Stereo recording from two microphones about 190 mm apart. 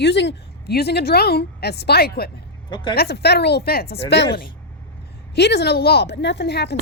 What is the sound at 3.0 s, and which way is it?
A woman's voice, 60° left (ahead or behind).